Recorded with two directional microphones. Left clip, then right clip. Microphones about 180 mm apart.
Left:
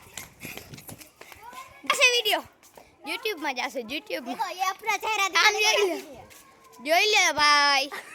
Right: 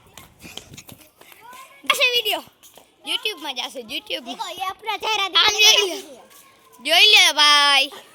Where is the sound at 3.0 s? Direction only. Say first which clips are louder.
Right 6 dB; 10° left (ahead or behind).